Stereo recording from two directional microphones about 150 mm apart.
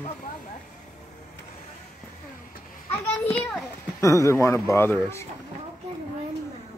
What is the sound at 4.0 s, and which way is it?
Speech, 20° left (ahead or behind).